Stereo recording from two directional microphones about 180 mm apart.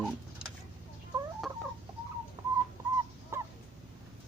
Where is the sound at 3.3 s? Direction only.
15° right (ahead or behind).